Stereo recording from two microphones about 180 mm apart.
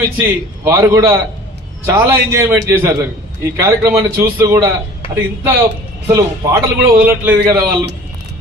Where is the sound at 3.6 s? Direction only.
15° right (ahead or behind).